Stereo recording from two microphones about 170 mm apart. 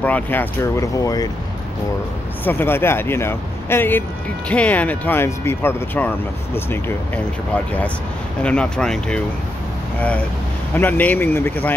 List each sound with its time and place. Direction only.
0.0 s speech: 10° left (ahead or behind)
2.4 s speech: 15° left (ahead or behind)
8.4 s speech: 5° left (ahead or behind)